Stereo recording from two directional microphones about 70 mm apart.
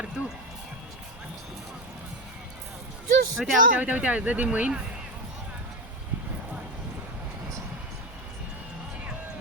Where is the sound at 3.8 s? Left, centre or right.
Centre.